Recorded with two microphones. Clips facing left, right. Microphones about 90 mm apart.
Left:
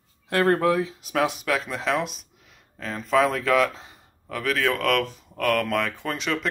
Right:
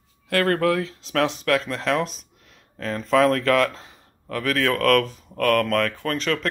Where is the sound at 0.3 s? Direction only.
20° left (ahead or behind).